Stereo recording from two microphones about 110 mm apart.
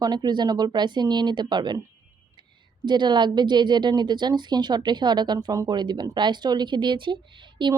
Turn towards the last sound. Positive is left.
turn(degrees=-45)  # may be behind; listen again after turning